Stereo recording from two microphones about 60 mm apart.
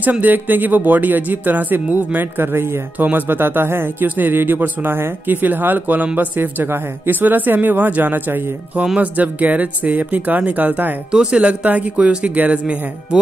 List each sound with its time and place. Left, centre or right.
0.0 s speech: right
11.1 s speech: centre
13.1 s speech: centre